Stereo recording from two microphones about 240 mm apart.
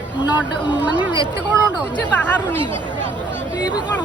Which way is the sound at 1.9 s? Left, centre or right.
Centre.